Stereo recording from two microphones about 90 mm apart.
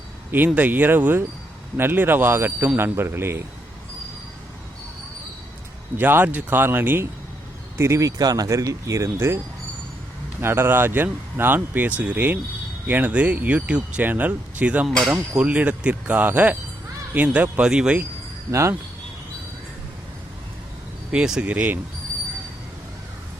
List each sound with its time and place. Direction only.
0.3 s speech: 20° right (ahead or behind)
6.0 s speech: 20° right (ahead or behind)
10.4 s speech: 25° right (ahead or behind)
14.8 s speech: centre (ahead or behind)
15.3 s speech: 15° right (ahead or behind)
21.1 s speech: 10° right (ahead or behind)